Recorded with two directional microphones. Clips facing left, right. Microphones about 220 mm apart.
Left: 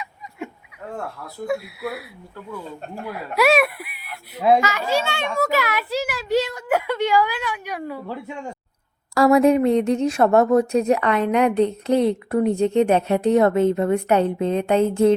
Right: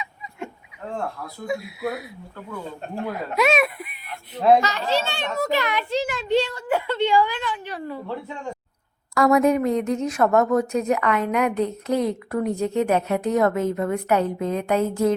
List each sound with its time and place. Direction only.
1.5 s speech: 5° left (ahead or behind)
3.3 s speech: 5° left (ahead or behind)
9.1 s speech: 30° left (ahead or behind)